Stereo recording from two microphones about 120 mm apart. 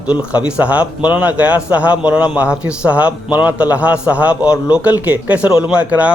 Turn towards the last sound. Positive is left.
turn(degrees=-10)  # may be behind; listen again after turning